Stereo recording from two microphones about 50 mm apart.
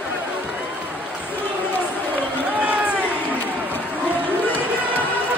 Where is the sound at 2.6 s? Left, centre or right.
Right.